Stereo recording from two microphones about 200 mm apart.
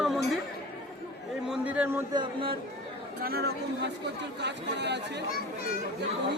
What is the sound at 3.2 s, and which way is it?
Speech, 50° right (ahead or behind).